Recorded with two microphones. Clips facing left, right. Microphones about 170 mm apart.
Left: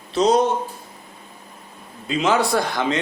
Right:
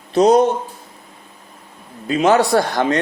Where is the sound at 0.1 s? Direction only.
60° right (ahead or behind).